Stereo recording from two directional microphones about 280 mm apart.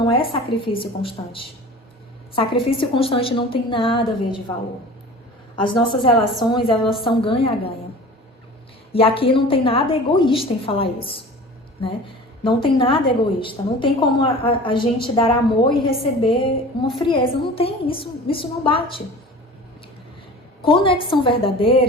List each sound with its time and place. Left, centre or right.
0.0 s a woman's voice: centre
5.5 s a woman's voice: centre
8.9 s a woman's voice: centre
12.4 s a woman's voice: centre
20.7 s a woman's voice: centre